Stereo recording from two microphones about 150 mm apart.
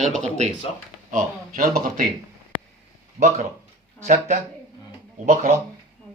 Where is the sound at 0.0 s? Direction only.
50° right (ahead or behind).